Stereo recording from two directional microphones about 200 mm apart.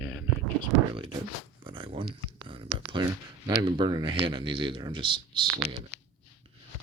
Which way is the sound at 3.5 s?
20° right (ahead or behind).